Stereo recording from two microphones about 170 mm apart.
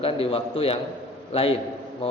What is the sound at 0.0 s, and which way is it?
A man's voice, 35° left (ahead or behind).